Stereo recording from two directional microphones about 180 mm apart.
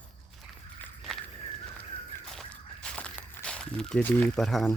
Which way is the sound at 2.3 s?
5° left (ahead or behind).